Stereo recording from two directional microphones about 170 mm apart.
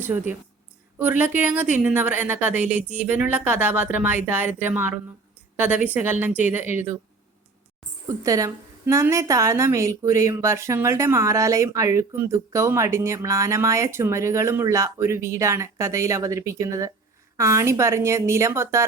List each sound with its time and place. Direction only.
0.0 s a woman's voice: 10° right (ahead or behind)
8.0 s a woman's voice: 20° right (ahead or behind)